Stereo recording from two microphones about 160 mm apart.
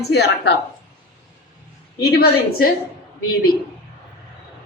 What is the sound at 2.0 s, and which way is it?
Speech, 90° left.